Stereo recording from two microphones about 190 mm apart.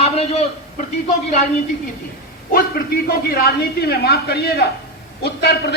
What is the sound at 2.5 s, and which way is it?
A man's voice, 55° left (ahead or behind).